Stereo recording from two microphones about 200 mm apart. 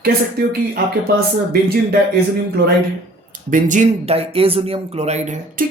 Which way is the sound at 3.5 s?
40° right (ahead or behind).